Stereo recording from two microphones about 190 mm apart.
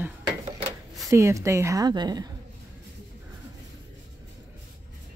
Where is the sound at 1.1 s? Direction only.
15° right (ahead or behind).